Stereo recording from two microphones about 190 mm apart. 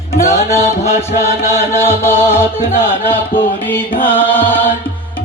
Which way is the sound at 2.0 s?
10° left (ahead or behind).